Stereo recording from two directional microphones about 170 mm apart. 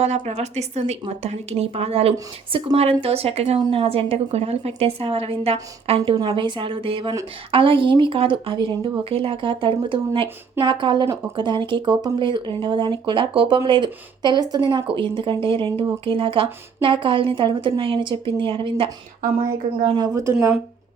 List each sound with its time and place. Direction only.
0.0 s speech: 40° right (ahead or behind)